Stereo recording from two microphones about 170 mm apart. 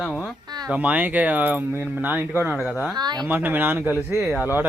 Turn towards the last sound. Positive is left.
turn(degrees=-10)  # may be behind; listen again after turning